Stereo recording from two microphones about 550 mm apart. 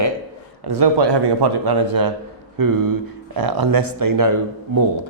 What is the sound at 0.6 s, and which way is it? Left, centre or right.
Speech, right.